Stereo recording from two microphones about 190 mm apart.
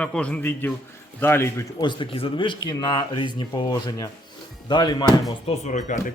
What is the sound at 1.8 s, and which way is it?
Speech, 25° left (ahead or behind).